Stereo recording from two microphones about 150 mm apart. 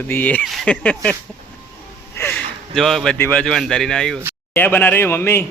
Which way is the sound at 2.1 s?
15° left (ahead or behind).